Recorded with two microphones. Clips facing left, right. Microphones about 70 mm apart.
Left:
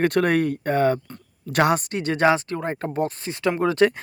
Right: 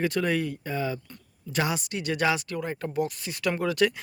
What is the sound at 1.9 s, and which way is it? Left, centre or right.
Speech, left.